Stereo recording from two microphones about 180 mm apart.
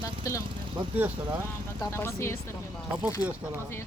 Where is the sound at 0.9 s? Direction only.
10° right (ahead or behind).